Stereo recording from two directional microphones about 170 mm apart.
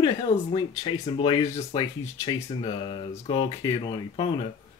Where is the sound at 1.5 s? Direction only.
40° left (ahead or behind).